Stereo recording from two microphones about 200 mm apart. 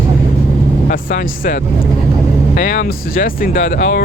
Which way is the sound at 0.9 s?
45° left (ahead or behind).